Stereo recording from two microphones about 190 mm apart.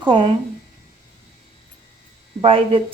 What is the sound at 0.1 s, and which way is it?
Speech, 30° right (ahead or behind).